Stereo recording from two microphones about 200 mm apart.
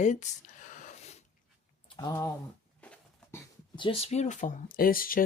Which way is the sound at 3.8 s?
30° left (ahead or behind).